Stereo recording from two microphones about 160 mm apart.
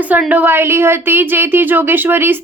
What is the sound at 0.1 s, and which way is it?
Speech, 10° right (ahead or behind).